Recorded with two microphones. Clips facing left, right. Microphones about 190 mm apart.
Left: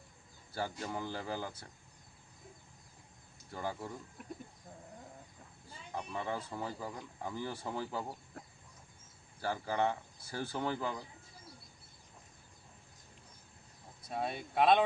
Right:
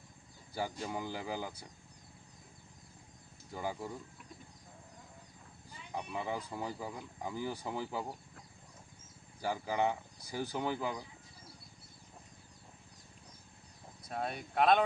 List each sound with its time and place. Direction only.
0.5 s speech: 10° right (ahead or behind)
3.5 s speech: 10° right (ahead or behind)
4.2 s chicken: 50° left (ahead or behind)
5.9 s speech: 10° right (ahead or behind)
9.4 s speech: 10° right (ahead or behind)
14.1 s speech: centre (ahead or behind)